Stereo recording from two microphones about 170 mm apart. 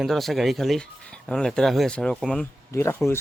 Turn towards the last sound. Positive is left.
turn(degrees=15)  # may be behind; listen again after turning